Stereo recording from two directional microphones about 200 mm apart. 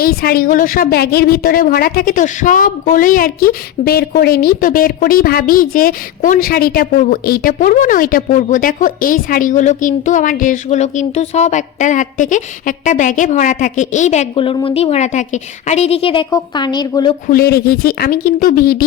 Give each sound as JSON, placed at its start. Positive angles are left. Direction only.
{"t": 0.0, "sound": "a woman's voice", "side_deg": 50}
{"t": 17.2, "sound": "speech", "side_deg": 50}